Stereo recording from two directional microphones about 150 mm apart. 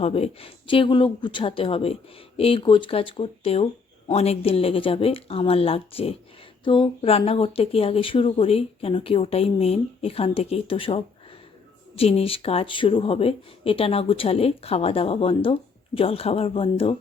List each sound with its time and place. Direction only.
0.0 s speech: 40° left (ahead or behind)